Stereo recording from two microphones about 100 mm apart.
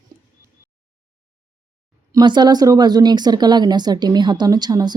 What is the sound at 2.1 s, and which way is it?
Speech, 45° right (ahead or behind).